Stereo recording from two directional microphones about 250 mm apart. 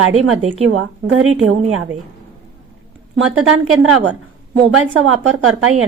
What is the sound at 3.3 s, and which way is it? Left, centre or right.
A woman's voice, right.